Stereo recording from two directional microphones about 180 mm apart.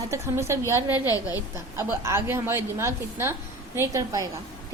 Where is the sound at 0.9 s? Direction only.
20° left (ahead or behind).